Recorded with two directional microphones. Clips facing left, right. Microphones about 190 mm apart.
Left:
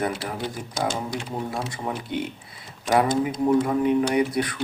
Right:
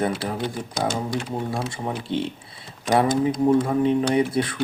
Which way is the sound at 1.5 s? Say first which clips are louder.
Right 2 dB; 30° right (ahead or behind).